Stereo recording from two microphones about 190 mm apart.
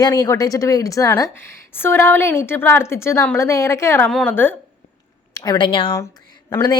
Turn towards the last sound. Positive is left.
turn(degrees=20)  # may be behind; listen again after turning